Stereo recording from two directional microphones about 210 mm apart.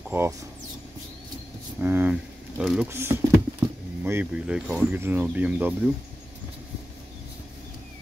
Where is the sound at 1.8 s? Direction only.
10° right (ahead or behind).